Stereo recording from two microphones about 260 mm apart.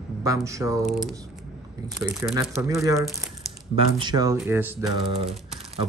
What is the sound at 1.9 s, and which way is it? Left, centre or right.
Speech, centre.